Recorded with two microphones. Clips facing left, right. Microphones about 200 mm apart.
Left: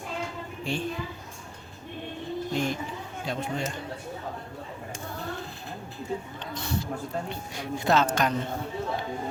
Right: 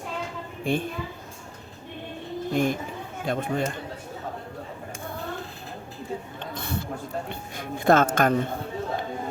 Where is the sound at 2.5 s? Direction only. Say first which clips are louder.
Right 6 dB; 55° right (ahead or behind).